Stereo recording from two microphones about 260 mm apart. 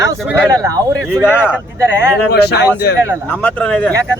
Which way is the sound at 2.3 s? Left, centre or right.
Left.